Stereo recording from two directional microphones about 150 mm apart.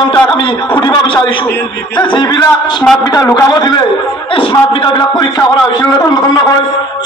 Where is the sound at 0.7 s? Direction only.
30° left (ahead or behind).